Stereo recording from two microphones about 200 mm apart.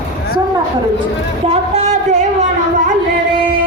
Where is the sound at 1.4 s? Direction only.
30° right (ahead or behind).